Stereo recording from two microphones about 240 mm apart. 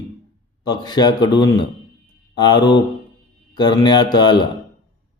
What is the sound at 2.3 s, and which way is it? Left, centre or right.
Mantra, centre.